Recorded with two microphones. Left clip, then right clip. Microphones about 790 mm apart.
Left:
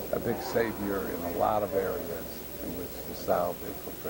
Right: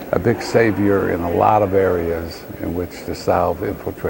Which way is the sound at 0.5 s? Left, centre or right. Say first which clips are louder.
Right 14 dB; right.